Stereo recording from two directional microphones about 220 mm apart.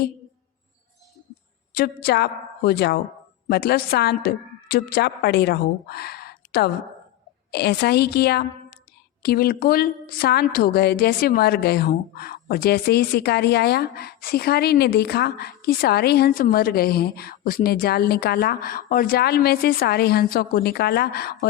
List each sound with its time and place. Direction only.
1.7 s a woman's voice: 45° left (ahead or behind)